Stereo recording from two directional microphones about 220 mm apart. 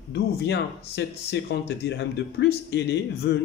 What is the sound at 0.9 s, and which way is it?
A man's voice, 50° left (ahead or behind).